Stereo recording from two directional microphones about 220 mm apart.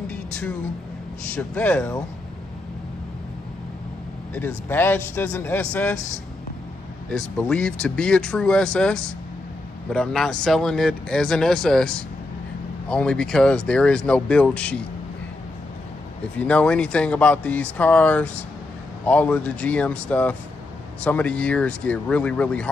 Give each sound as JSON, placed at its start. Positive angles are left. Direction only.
{"t": 1.3, "sound": "a man's voice", "side_deg": 5}
{"t": 4.6, "sound": "a man's voice", "side_deg": 10}
{"t": 7.1, "sound": "speech", "side_deg": 5}
{"t": 16.3, "sound": "speech", "side_deg": 5}